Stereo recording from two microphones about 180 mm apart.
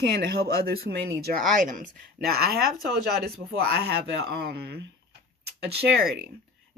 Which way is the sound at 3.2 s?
60° right (ahead or behind).